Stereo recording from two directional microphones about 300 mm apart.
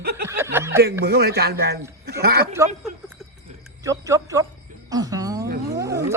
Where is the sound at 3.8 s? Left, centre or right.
Centre.